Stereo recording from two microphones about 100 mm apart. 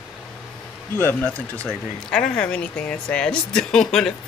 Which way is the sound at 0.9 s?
20° left (ahead or behind).